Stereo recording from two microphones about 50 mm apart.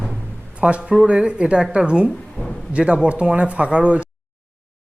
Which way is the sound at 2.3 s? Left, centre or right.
Centre.